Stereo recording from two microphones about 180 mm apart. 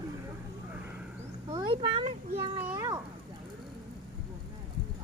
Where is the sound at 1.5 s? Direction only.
30° right (ahead or behind).